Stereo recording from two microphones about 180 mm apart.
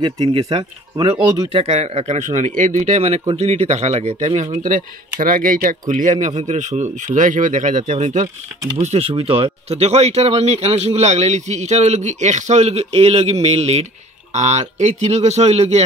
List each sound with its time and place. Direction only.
0.0 s speech: 30° right (ahead or behind)